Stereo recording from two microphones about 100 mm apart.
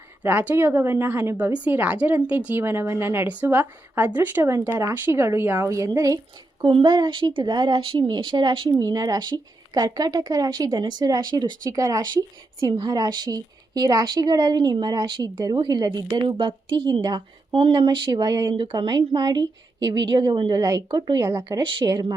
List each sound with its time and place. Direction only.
0.3 s a woman's voice: 20° right (ahead or behind); by 6.1 s 35° right (ahead or behind)
6.7 s a woman's voice: 50° right (ahead or behind)
8.8 s speech: 35° right (ahead or behind)
16.2 s a woman's voice: 55° right (ahead or behind)
20.6 s speech: 35° right (ahead or behind)
21.6 s a woman's voice: 55° right (ahead or behind)